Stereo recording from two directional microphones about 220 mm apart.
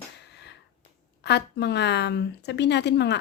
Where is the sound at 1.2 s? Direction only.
50° left (ahead or behind).